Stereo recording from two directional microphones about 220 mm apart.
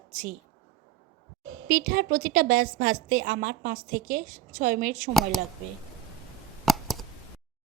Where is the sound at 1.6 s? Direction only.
40° right (ahead or behind).